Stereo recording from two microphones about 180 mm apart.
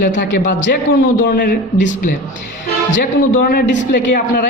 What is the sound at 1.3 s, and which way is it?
Speech, 50° left (ahead or behind).